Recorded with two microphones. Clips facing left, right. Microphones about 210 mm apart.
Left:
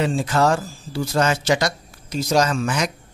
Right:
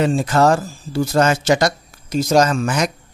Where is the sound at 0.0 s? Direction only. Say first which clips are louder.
Right 4 dB; 45° right (ahead or behind).